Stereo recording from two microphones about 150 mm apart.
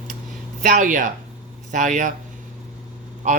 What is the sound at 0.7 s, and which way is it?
Speech, 60° right (ahead or behind).